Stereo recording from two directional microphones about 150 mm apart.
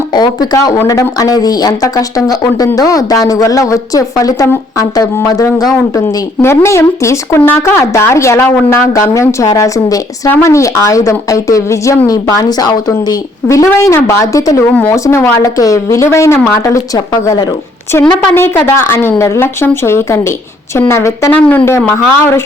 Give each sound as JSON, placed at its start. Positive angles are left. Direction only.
{"t": 0.1, "sound": "speech", "side_deg": 30}